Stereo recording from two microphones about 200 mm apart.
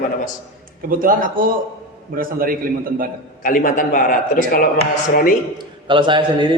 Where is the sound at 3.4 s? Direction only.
40° left (ahead or behind).